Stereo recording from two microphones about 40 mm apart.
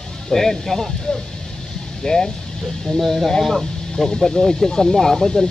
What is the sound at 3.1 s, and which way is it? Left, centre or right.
Speech, centre.